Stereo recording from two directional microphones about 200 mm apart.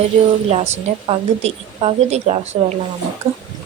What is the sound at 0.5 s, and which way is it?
A woman's voice, 35° right (ahead or behind).